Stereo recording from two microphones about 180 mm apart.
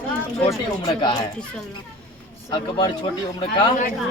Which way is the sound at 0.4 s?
30° left (ahead or behind).